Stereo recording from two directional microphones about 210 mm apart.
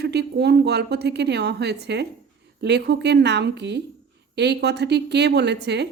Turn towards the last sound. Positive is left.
turn(degrees=-55)  # may be behind; listen again after turning